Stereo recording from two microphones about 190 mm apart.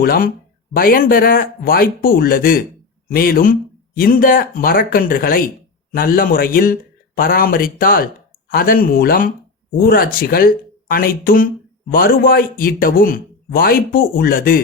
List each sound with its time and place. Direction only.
0.0 s speech: 50° left (ahead or behind)